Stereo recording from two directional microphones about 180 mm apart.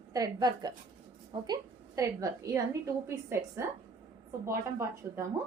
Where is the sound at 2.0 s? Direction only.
15° right (ahead or behind).